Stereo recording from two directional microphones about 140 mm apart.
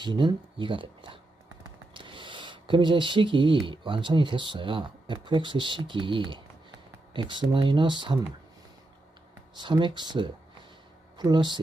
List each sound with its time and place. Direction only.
0.0 s speech: 30° right (ahead or behind)
9.6 s speech: 35° right (ahead or behind)